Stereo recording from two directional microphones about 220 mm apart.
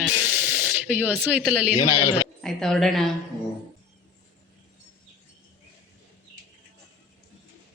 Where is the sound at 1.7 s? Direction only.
20° left (ahead or behind).